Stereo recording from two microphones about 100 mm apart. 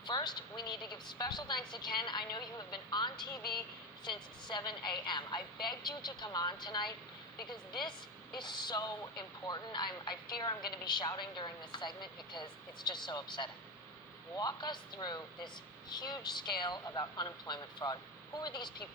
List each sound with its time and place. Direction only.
0.0 s speech: 45° left (ahead or behind)